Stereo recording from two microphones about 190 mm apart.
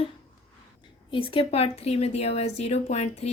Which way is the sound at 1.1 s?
30° left (ahead or behind).